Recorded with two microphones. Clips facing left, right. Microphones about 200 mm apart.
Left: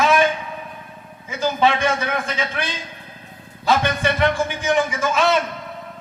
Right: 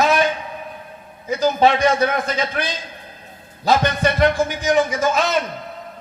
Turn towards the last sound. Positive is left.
turn(degrees=-40)  # may be behind; listen again after turning